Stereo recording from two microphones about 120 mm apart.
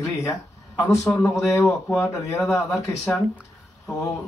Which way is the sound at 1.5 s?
Centre (ahead or behind).